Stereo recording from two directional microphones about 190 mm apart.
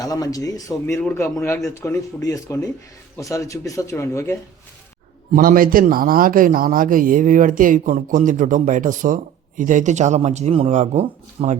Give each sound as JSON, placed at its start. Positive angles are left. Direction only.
{"t": 0.0, "sound": "speech", "side_deg": 20}
{"t": 5.3, "sound": "a man's voice", "side_deg": -50}